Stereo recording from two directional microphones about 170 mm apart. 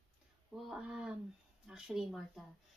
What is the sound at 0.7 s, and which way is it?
Speech, 5° right (ahead or behind).